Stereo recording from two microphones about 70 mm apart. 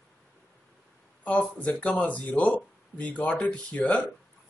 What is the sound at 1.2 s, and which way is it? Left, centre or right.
Speech, left.